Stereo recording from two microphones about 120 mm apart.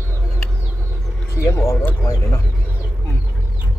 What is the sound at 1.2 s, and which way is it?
Speech, 20° left (ahead or behind).